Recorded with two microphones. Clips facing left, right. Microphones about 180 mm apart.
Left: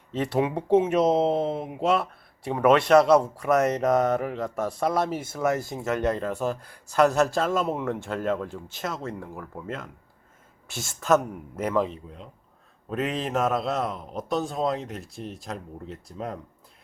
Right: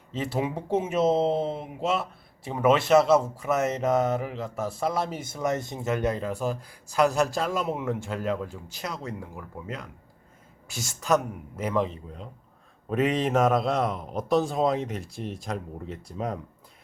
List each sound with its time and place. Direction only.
0.1 s speech: centre (ahead or behind)
12.9 s speech: centre (ahead or behind)